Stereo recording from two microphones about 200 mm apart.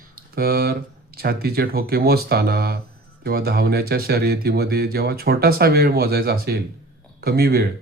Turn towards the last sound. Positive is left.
turn(degrees=-50)  # may be behind; listen again after turning